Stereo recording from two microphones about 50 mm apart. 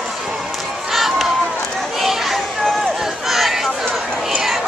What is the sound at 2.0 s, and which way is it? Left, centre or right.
Children playing, centre.